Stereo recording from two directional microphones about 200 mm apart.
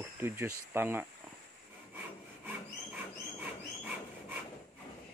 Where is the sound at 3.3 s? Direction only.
5° right (ahead or behind).